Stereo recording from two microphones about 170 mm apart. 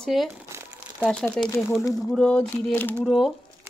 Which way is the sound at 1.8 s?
20° left (ahead or behind).